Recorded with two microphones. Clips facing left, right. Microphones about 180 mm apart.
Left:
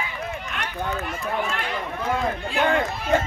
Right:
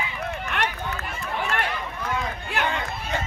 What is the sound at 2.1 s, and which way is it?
Run, 50° left (ahead or behind).